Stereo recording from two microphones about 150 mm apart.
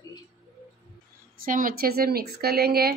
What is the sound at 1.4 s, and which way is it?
Speech, 65° right (ahead or behind).